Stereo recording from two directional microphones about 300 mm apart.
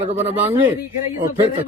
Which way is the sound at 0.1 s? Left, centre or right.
Right.